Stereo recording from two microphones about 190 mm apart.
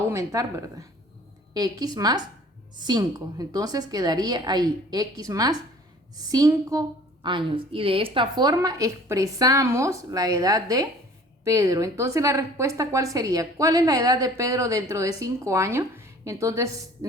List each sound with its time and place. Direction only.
0.1 s a woman's voice: 15° right (ahead or behind)